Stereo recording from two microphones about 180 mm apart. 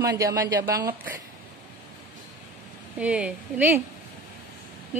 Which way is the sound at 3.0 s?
5° right (ahead or behind).